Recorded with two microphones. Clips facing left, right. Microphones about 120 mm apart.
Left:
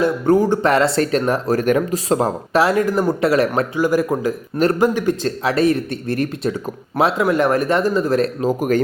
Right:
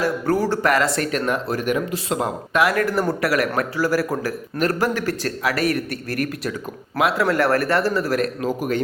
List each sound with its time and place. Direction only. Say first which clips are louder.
0.0 s a man's voice: left 5 dB; 20° left (ahead or behind)
2.8 s a man's voice: left 4 dB; 15° left (ahead or behind)